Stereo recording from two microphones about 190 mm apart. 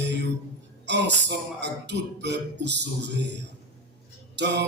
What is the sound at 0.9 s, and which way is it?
Speech, 65° right (ahead or behind).